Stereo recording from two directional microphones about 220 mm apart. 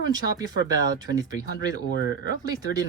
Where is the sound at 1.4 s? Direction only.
15° right (ahead or behind).